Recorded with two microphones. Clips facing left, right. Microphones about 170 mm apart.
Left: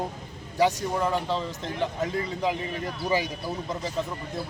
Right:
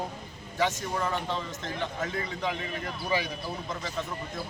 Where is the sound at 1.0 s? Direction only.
5° left (ahead or behind).